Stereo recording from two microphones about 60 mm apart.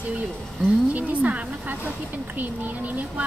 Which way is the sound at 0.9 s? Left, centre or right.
Right.